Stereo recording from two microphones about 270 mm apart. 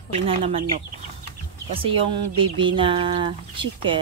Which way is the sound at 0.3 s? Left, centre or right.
Right.